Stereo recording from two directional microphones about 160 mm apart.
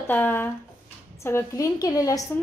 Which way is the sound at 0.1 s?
10° left (ahead or behind).